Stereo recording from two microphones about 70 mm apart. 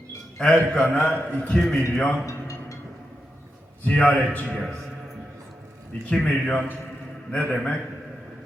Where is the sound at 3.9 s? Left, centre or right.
Centre.